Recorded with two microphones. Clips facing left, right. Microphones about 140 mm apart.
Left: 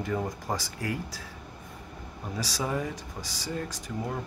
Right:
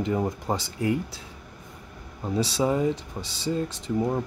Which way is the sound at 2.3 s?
25° right (ahead or behind).